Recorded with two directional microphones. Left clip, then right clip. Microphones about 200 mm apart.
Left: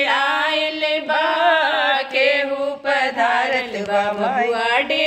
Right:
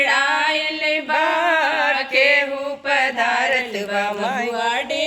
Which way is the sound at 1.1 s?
30° right (ahead or behind).